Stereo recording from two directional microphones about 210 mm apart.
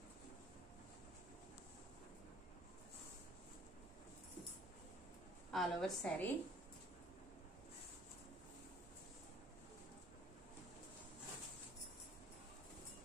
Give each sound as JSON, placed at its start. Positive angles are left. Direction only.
{"t": 5.5, "sound": "a woman's voice", "side_deg": 0}